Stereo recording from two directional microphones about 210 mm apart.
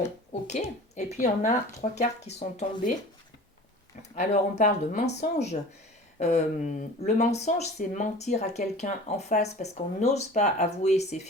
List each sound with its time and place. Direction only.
0.4 s speech: 35° left (ahead or behind)
4.2 s speech: 35° left (ahead or behind)
6.1 s speech: 35° left (ahead or behind)